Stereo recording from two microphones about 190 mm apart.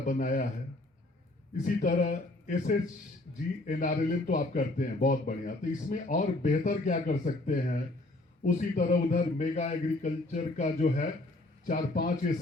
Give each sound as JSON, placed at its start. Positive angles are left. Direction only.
{"t": 0.0, "sound": "speech", "side_deg": 45}
{"t": 1.6, "sound": "a man's voice", "side_deg": 40}